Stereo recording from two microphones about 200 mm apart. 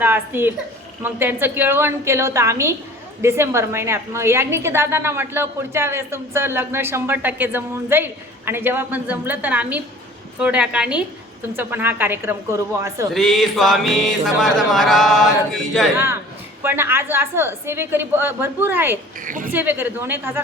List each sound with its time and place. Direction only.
0.0 s a woman's voice: 10° right (ahead or behind)
13.1 s speech: centre (ahead or behind)
16.6 s a woman's voice: 10° right (ahead or behind)
19.2 s a woman's voice: 40° right (ahead or behind)
19.5 s a woman's voice: 10° right (ahead or behind)